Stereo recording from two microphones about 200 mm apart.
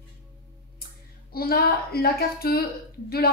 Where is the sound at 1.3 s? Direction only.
50° left (ahead or behind).